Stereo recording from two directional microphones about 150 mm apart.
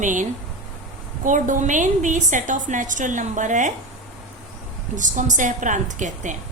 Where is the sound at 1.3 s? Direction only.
60° right (ahead or behind).